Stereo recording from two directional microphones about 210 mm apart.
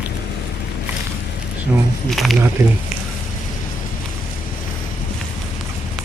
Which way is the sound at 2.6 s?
15° right (ahead or behind).